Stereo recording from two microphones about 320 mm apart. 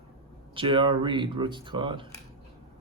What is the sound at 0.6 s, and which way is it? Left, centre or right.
Speech, centre.